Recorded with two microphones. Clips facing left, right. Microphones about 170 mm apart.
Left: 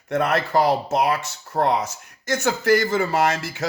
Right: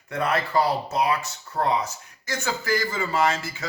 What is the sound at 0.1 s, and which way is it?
Speech, 80° left.